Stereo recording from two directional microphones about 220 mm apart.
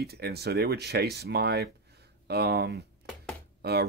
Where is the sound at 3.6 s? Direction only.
45° right (ahead or behind).